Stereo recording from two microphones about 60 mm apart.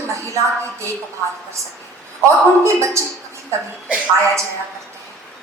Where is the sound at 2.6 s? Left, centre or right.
Right.